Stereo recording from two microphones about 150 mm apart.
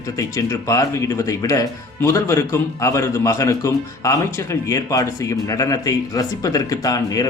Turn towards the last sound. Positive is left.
turn(degrees=25)  # may be behind; listen again after turning